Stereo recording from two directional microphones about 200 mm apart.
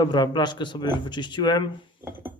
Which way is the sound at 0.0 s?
20° left (ahead or behind).